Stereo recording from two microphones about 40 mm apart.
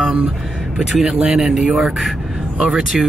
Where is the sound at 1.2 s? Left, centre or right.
Centre.